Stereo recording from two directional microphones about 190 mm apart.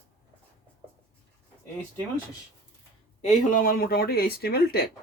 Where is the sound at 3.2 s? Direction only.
45° left (ahead or behind).